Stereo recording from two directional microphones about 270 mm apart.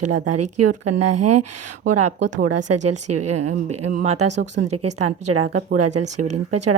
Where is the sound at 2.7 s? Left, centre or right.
Right.